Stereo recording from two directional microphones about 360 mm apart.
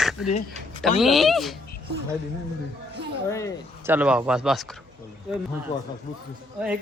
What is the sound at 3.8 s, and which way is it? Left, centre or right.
Speech, centre.